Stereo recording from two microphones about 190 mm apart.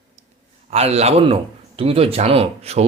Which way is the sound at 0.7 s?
35° right (ahead or behind).